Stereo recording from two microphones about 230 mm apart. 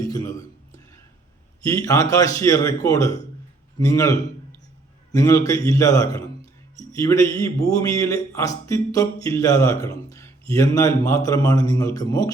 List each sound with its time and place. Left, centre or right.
0.0 s a sound: centre
1.6 s speech: centre
5.1 s speech: centre